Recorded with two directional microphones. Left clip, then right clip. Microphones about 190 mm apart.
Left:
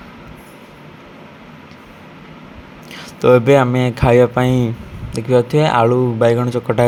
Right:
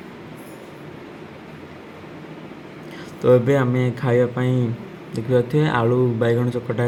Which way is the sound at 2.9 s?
35° left (ahead or behind).